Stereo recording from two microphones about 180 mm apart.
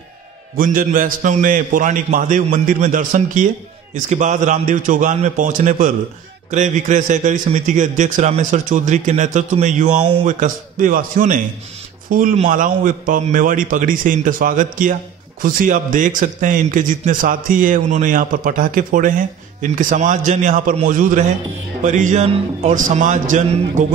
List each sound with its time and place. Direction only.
0.6 s speech: 50° right (ahead or behind)